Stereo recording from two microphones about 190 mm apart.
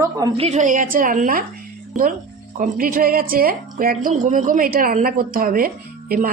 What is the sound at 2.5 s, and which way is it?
A woman's voice, 45° right (ahead or behind).